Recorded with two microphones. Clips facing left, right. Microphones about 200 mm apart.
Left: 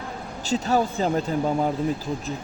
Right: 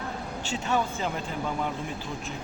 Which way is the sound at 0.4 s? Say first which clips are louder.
Left 6 dB; 35° left (ahead or behind).